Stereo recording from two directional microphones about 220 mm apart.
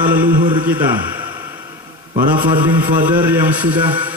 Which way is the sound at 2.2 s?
20° right (ahead or behind).